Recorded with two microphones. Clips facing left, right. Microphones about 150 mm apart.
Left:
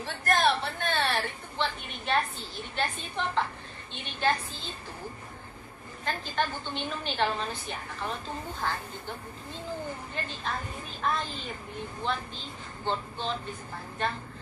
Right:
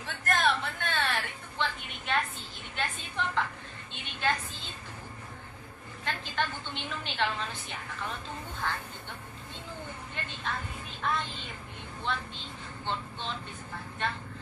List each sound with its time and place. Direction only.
0.0 s a sound: 35° left (ahead or behind)
4.1 s a woman's voice: 35° left (ahead or behind)
6.0 s a woman's voice: 40° left (ahead or behind)
10.1 s a woman's voice: 35° left (ahead or behind)
12.8 s speech: 35° left (ahead or behind)